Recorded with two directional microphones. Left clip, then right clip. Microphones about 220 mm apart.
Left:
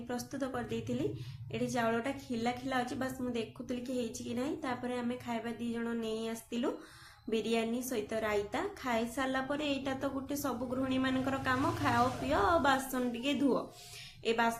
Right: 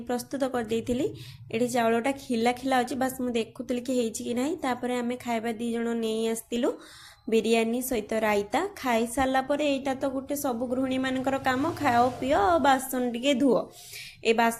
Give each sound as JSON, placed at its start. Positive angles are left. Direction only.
{"t": 0.1, "sound": "a woman's voice", "side_deg": -30}